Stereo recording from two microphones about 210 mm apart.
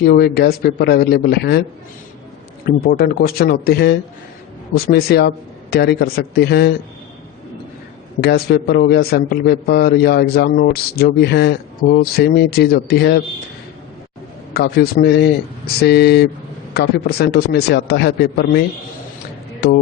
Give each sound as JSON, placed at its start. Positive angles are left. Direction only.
{"t": 0.0, "sound": "a man's voice", "side_deg": 50}
{"t": 2.6, "sound": "a man's voice", "side_deg": 45}
{"t": 8.2, "sound": "a man's voice", "side_deg": 50}
{"t": 14.5, "sound": "a man's voice", "side_deg": 50}